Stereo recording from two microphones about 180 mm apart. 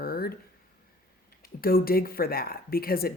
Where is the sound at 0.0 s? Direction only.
55° left (ahead or behind).